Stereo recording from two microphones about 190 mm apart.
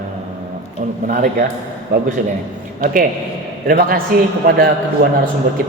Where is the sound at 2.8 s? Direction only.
45° right (ahead or behind).